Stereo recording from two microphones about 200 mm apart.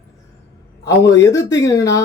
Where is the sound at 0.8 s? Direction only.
15° left (ahead or behind).